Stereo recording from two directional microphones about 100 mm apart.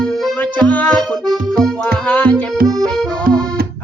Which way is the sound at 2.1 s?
15° left (ahead or behind).